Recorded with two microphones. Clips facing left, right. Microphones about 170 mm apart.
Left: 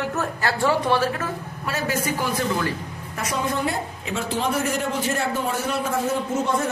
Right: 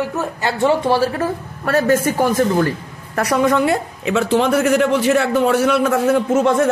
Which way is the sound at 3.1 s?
65° right (ahead or behind).